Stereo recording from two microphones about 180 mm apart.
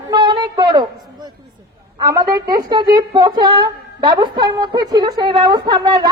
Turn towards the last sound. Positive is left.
turn(degrees=-20)  # may be behind; listen again after turning